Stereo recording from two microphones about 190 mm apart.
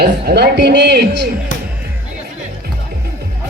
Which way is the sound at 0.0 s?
55° right (ahead or behind).